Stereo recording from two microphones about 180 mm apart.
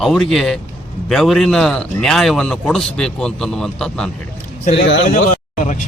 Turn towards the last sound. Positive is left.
turn(degrees=45)  # may be behind; listen again after turning